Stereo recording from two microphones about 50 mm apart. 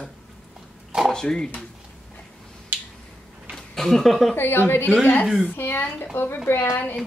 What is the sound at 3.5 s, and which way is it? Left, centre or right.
Speech, centre.